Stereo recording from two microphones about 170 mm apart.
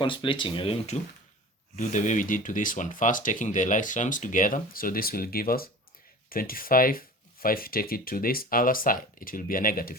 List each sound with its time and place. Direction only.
0.0 s speech: 30° left (ahead or behind)
1.7 s speech: 50° left (ahead or behind)